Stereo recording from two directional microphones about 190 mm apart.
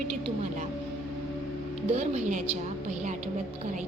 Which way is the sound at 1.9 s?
40° right (ahead or behind).